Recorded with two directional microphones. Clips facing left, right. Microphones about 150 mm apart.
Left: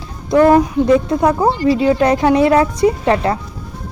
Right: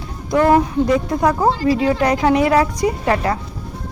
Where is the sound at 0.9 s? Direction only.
20° left (ahead or behind).